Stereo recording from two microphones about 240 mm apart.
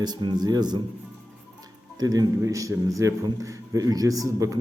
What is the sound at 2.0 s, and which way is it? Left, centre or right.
A man's voice, centre.